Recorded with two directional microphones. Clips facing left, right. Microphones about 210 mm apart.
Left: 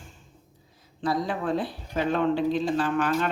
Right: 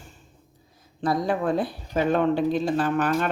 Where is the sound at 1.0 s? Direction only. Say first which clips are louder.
Right 3 dB; 45° right (ahead or behind).